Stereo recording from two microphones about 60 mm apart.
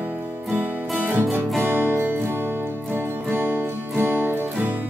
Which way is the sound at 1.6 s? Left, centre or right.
Right.